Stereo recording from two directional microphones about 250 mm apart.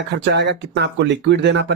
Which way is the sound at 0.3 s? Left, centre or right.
Right.